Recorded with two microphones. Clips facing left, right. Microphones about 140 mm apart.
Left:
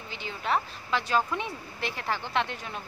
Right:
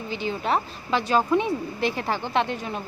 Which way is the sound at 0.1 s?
30° right (ahead or behind).